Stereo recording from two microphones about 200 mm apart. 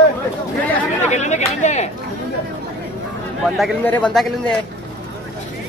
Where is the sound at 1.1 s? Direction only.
35° left (ahead or behind).